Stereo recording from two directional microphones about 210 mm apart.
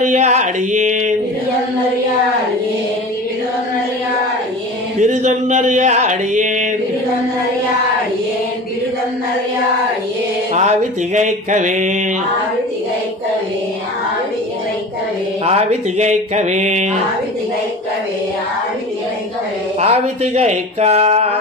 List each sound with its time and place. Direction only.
0.0 s mantra: 35° right (ahead or behind)
5.0 s mantra: 35° right (ahead or behind)
10.5 s mantra: 35° right (ahead or behind)
15.4 s mantra: 30° right (ahead or behind)
19.8 s mantra: 30° right (ahead or behind)